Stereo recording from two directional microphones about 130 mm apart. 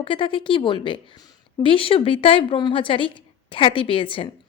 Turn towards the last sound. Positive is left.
turn(degrees=45)  # may be behind; listen again after turning